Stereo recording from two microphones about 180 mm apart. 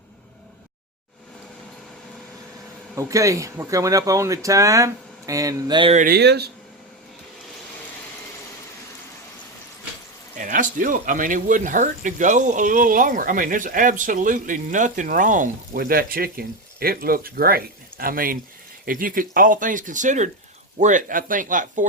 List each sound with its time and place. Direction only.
2.9 s speech: 15° right (ahead or behind)
6.1 s speech: 65° right (ahead or behind)
10.3 s speech: 45° right (ahead or behind)